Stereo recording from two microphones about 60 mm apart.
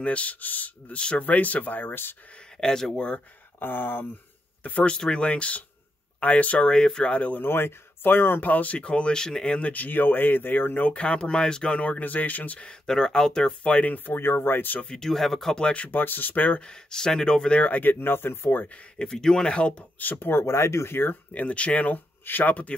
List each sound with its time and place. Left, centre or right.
0.0 s speech: left
2.6 s speech: centre
3.5 s speech: left
4.6 s speech: left
6.7 s speech: centre
7.1 s speech: left
10.9 s speech: centre; by 14.8 s left
14.8 s speech: centre
16.0 s speech: left
16.6 s speech: centre; by 18.7 s left
18.9 s speech: centre
19.4 s speech: centre
20.0 s speech: left